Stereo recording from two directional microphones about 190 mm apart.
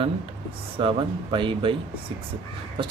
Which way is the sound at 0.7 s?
25° right (ahead or behind).